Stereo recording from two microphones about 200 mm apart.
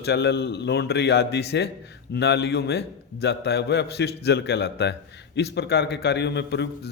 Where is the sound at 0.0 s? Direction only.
55° left (ahead or behind).